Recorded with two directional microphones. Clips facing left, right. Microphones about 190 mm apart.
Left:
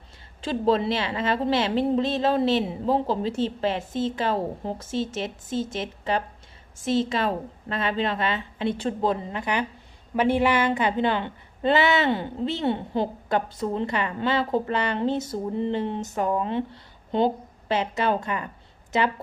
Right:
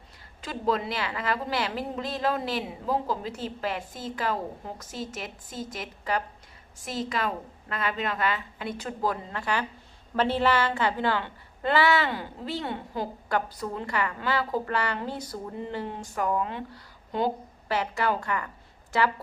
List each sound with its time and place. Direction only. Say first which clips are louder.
0.4 s a woman's voice: left 6 dB; 30° left (ahead or behind)